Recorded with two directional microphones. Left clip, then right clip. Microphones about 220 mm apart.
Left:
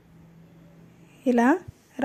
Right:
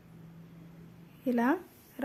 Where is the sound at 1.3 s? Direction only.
30° left (ahead or behind).